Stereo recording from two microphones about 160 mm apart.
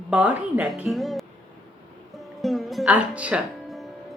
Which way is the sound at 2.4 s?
Centre (ahead or behind).